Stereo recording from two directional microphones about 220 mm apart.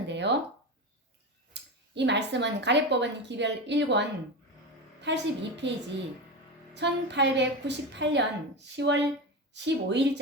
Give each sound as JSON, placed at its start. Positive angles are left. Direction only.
{"t": 0.1, "sound": "a sound", "side_deg": -50}
{"t": 1.5, "sound": "speech", "side_deg": -50}
{"t": 6.7, "sound": "speech", "side_deg": -50}